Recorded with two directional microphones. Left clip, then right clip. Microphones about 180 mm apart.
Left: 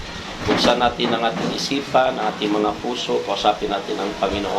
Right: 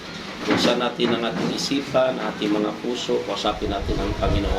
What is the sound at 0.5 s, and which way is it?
Speech, 15° right (ahead or behind).